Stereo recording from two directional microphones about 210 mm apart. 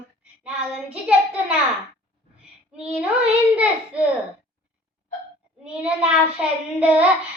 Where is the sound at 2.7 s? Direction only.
5° right (ahead or behind).